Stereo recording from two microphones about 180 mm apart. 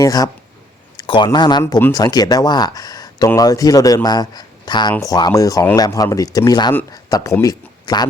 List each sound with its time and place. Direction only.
0.0 s speech: 20° left (ahead or behind)